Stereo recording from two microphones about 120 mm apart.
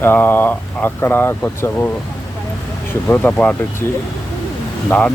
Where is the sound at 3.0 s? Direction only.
15° left (ahead or behind).